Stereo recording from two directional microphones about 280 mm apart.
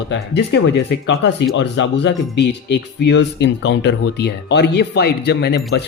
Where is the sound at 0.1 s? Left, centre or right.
Left.